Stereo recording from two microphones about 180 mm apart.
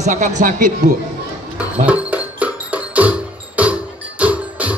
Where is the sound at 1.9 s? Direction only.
10° right (ahead or behind).